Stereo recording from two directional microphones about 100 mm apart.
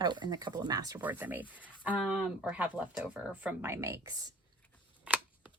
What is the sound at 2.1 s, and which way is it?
Speech, 5° right (ahead or behind).